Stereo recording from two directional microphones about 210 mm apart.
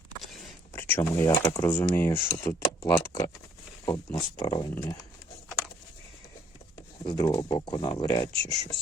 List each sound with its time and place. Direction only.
0.2 s speech: 5° left (ahead or behind)
7.0 s speech: 20° left (ahead or behind)